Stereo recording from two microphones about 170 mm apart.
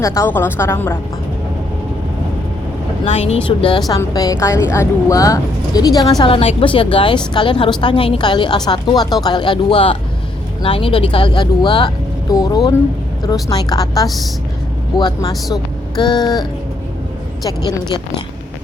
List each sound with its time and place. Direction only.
0.0 s a woman's voice: 15° left (ahead or behind)
3.0 s speech: 35° left (ahead or behind)
3.7 s speech: 25° left (ahead or behind)